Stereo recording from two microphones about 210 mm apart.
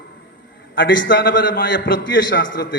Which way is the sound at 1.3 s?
45° left (ahead or behind).